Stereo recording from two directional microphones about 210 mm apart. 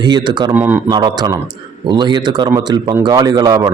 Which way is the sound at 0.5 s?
10° right (ahead or behind).